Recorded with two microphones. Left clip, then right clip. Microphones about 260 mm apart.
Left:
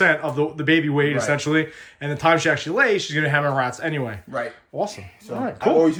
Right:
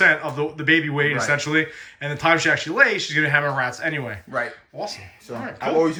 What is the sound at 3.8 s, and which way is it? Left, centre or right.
Speech, centre.